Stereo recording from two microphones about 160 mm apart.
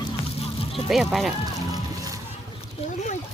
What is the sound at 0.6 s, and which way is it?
Music, 35° left (ahead or behind).